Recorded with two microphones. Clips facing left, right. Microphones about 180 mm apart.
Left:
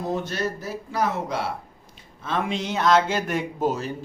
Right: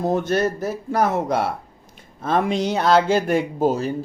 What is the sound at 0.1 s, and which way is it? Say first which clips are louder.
Speech: right 5 dB; 55° right (ahead or behind).